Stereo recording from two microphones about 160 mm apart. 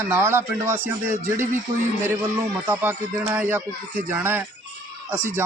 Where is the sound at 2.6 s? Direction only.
15° right (ahead or behind).